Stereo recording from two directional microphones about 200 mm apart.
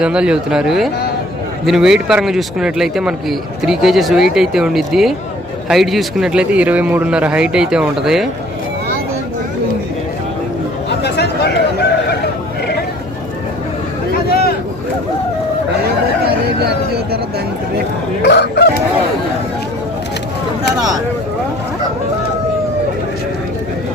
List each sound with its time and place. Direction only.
0.0 s a man's voice: 5° right (ahead or behind)
10.8 s chatter: 55° left (ahead or behind)
18.3 s crowing: 55° left (ahead or behind)